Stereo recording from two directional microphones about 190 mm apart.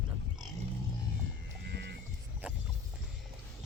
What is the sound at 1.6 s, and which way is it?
Music, 60° right (ahead or behind).